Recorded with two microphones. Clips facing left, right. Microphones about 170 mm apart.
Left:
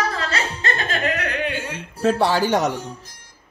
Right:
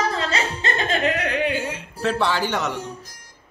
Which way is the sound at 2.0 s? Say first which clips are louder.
Left 4 dB; 40° left (ahead or behind).